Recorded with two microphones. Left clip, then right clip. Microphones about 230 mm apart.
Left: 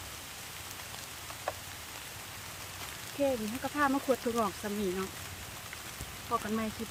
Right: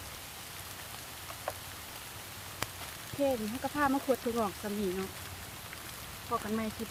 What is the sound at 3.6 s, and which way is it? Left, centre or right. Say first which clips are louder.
Speech: left 1 dB; centre.